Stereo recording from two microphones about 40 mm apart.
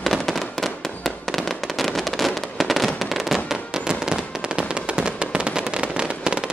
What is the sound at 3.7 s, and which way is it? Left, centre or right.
Fireworks, centre.